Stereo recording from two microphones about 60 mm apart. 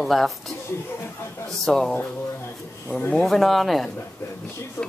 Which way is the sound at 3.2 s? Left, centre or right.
Centre.